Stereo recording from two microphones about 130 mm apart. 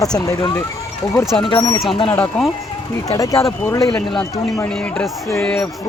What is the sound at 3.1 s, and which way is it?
Speech, 25° left (ahead or behind).